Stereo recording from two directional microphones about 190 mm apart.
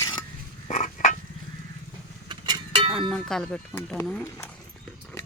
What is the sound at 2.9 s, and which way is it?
Speech, centre (ahead or behind).